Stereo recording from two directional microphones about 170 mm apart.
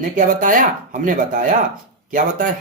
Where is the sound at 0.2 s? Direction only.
50° right (ahead or behind).